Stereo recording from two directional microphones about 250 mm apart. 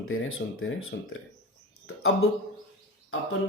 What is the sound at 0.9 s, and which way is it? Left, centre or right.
Speech, left.